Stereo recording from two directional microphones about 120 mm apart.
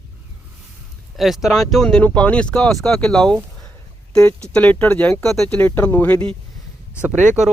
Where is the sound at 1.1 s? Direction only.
Centre (ahead or behind).